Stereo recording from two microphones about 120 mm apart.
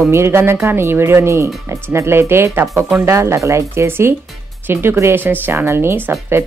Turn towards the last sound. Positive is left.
turn(degrees=-20)  # may be behind; listen again after turning